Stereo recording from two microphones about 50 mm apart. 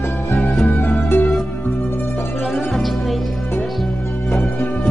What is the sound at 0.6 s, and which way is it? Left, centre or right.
Music, left.